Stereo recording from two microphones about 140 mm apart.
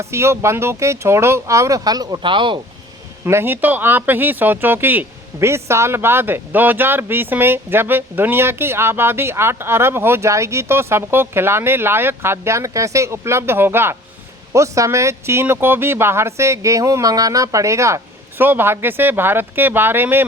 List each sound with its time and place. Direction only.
0.0 s speech: 20° right (ahead or behind); by 2.6 s 35° right (ahead or behind)
3.2 s speech: 15° right (ahead or behind)